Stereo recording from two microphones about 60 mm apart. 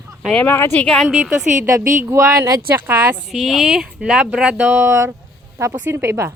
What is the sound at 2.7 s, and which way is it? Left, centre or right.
Speech, right.